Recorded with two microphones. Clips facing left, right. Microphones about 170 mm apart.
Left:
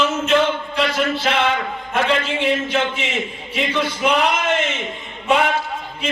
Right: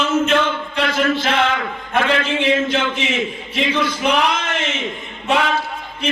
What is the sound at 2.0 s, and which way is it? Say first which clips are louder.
A man's voice: right 1 dB; 70° right (ahead or behind).